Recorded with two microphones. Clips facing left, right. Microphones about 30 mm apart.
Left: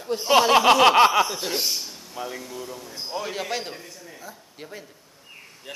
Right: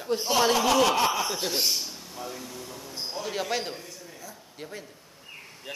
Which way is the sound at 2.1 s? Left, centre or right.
Left.